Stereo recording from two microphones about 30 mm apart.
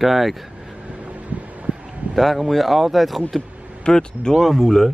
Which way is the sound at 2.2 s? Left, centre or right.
Centre.